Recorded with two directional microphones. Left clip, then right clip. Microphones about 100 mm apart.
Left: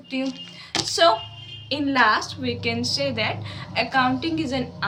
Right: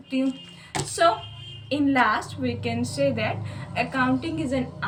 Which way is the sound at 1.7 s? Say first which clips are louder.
Left 2 dB; 30° left (ahead or behind).